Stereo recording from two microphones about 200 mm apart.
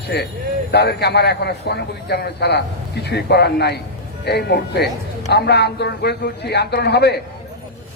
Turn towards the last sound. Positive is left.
turn(degrees=55)  # may be behind; listen again after turning